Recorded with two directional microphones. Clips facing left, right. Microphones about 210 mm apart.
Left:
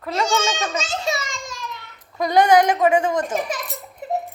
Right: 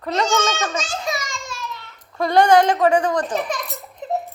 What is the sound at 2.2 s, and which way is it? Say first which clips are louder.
Speech: right 1 dB; 20° left (ahead or behind).